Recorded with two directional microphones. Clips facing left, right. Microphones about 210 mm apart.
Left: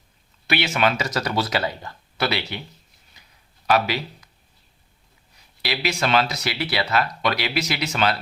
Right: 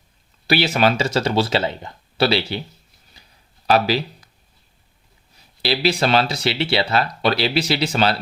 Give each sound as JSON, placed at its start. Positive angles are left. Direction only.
{"t": 0.4, "sound": "speech", "side_deg": -35}
{"t": 3.2, "sound": "a sound", "side_deg": -30}
{"t": 3.7, "sound": "speech", "side_deg": -30}
{"t": 5.6, "sound": "speech", "side_deg": -30}